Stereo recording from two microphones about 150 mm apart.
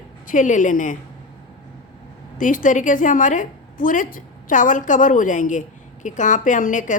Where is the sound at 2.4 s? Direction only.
60° left (ahead or behind).